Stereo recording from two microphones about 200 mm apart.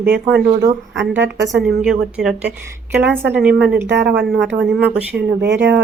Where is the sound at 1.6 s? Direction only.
5° right (ahead or behind).